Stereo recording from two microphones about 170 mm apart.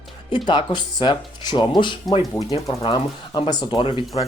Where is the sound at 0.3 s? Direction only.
25° left (ahead or behind).